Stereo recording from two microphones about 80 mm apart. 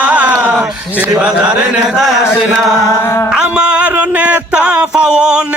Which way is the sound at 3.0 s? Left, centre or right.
Left.